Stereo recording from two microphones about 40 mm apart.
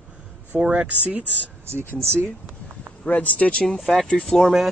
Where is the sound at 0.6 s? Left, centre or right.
Right.